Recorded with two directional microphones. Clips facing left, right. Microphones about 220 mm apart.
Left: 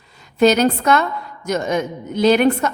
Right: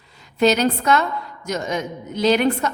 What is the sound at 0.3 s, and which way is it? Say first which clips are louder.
A woman's voice: left 3 dB; 50° left (ahead or behind).